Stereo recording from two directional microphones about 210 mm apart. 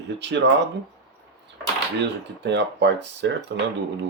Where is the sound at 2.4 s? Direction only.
55° right (ahead or behind).